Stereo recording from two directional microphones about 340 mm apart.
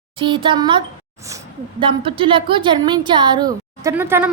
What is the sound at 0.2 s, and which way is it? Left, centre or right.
Speech, centre.